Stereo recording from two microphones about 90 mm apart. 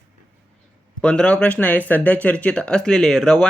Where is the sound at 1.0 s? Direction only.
10° left (ahead or behind).